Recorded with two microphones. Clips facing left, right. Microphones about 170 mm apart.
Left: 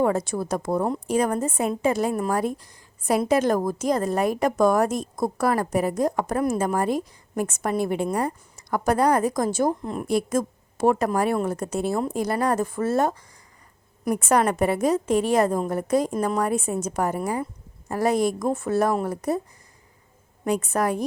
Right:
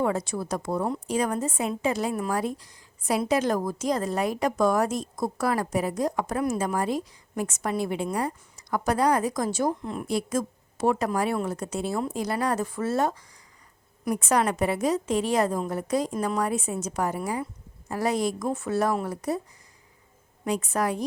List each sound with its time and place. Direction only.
0.0 s a woman's voice: 50° left (ahead or behind)
20.4 s a woman's voice: 50° left (ahead or behind)